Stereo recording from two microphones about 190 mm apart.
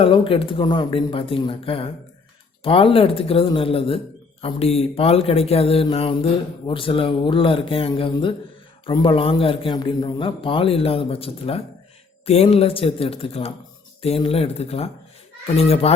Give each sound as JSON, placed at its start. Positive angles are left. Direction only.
{"t": 0.0, "sound": "a man's voice", "side_deg": 30}